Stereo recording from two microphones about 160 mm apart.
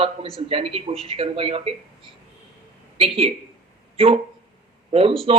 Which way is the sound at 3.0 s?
35° right (ahead or behind).